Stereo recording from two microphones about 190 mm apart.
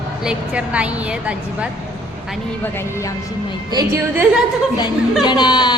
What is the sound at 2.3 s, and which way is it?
Speech, 5° left (ahead or behind).